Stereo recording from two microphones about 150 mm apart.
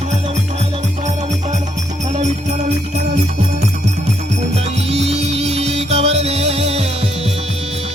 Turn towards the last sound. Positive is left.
turn(degrees=-45)  # may be behind; listen again after turning